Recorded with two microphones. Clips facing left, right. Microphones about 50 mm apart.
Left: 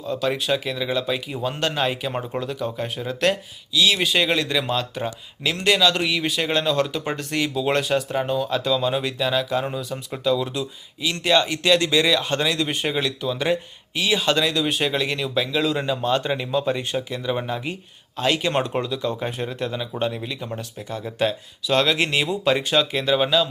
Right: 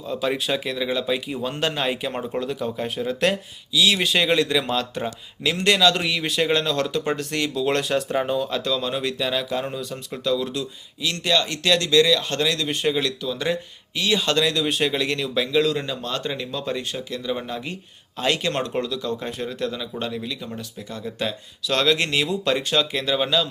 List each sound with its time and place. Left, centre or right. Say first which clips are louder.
0.0 s speech: left 1 dB; centre
15.8 s speech: left 6 dB; centre
18.2 s speech: left 1 dB; centre
18.5 s speech: left 2 dB; centre